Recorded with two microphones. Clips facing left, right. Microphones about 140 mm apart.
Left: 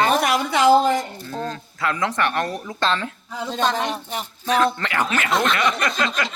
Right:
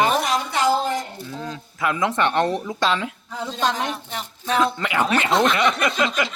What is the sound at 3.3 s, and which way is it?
Speech, centre (ahead or behind).